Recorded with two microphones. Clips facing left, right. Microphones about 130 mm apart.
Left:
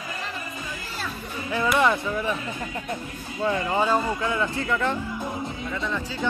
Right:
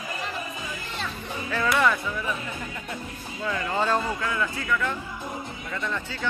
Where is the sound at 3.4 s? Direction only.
20° left (ahead or behind).